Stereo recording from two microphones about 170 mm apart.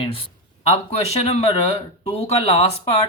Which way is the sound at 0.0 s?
30° left (ahead or behind).